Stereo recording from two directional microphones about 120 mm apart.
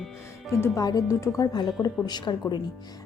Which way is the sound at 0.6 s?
20° left (ahead or behind).